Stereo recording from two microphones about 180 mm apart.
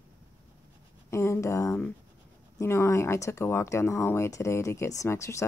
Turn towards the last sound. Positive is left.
turn(degrees=15)  # may be behind; listen again after turning